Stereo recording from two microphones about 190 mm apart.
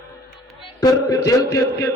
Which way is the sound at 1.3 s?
15° left (ahead or behind).